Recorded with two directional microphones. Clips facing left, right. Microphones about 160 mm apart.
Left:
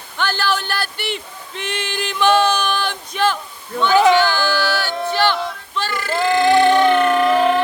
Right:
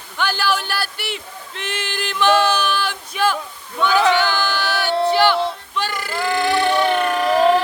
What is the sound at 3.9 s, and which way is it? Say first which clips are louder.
Speech: left 4 dB; 15° left (ahead or behind).